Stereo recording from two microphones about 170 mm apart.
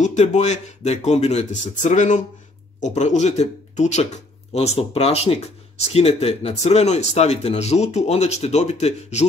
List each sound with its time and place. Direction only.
0.0 s a man's voice: 45° left (ahead or behind)